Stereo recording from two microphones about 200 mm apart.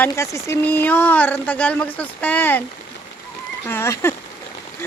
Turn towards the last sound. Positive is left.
turn(degrees=10)  # may be behind; listen again after turning